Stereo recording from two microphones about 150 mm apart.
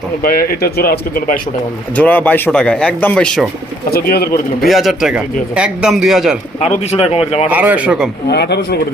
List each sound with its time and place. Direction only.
0.2 s speech: 80° left
2.0 s speech: 10° left (ahead or behind)
3.8 s speech: 90° left
4.6 s a man's voice: centre (ahead or behind)
6.6 s speech: 45° left (ahead or behind)
7.5 s speech: 10° right (ahead or behind)
8.3 s speech: 90° left